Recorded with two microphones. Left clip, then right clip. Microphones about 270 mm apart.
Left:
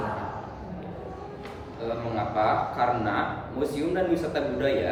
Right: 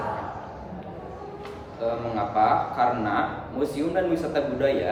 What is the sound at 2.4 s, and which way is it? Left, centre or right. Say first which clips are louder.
A man's voice: right 3 dB; centre.